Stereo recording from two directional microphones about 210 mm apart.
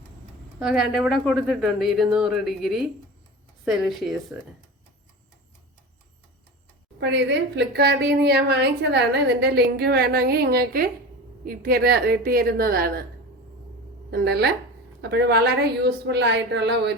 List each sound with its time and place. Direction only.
0.6 s speech: centre (ahead or behind)
7.0 s a woman's voice: 55° right (ahead or behind)
14.1 s a woman's voice: 50° right (ahead or behind)